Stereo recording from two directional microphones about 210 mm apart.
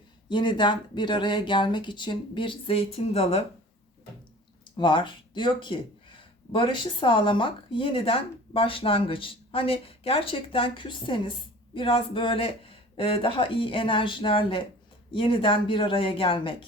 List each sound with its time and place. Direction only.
0.3 s speech: 20° left (ahead or behind)
4.8 s speech: 25° left (ahead or behind)